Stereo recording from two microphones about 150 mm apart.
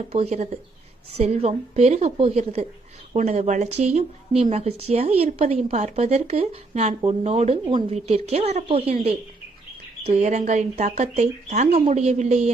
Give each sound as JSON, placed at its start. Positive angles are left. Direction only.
{"t": 0.0, "sound": "a woman's voice", "side_deg": -45}
{"t": 7.7, "sound": "a woman's voice", "side_deg": -30}
{"t": 7.9, "sound": "a woman's voice", "side_deg": -45}